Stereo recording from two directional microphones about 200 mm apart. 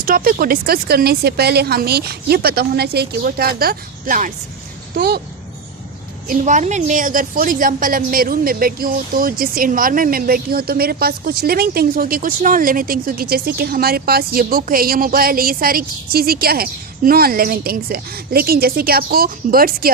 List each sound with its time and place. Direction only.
0.0 s a woman's voice: 45° right (ahead or behind)
4.9 s a woman's voice: 55° right (ahead or behind)
6.2 s a woman's voice: 40° right (ahead or behind)